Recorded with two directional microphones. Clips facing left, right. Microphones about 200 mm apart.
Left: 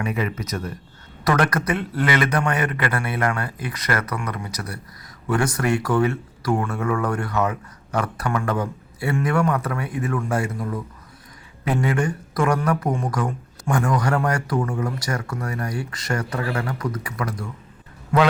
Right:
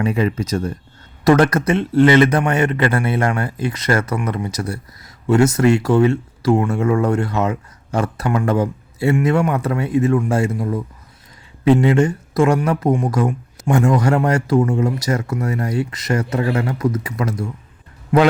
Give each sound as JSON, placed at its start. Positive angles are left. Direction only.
{"t": 0.0, "sound": "speech", "side_deg": -30}